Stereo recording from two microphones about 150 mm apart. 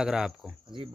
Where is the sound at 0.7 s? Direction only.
35° right (ahead or behind).